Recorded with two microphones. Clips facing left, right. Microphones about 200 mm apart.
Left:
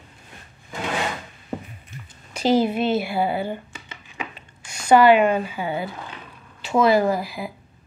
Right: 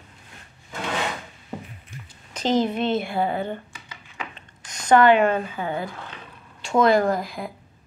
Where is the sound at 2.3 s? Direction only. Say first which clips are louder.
Left 3 dB; 10° left (ahead or behind).